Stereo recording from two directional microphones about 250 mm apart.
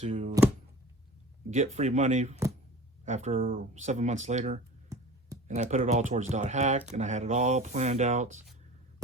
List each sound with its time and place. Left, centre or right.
0.0 s speech: right
1.5 s speech: right